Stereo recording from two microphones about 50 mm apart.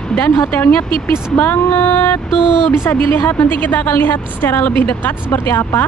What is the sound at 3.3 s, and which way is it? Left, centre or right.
A woman's voice, left.